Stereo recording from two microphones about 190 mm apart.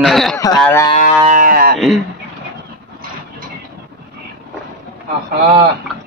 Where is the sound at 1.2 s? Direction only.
45° right (ahead or behind).